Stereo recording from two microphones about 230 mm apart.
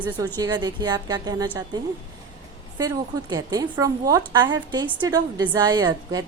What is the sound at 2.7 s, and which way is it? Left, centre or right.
A woman's voice, centre.